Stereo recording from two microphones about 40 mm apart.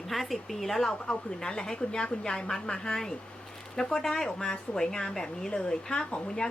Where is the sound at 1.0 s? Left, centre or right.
Centre.